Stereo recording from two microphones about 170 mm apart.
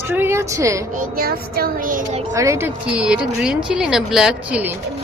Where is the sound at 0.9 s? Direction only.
55° right (ahead or behind).